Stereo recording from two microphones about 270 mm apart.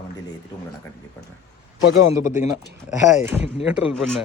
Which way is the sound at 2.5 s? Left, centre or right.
Centre.